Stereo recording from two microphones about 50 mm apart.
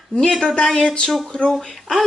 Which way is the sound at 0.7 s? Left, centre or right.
Centre.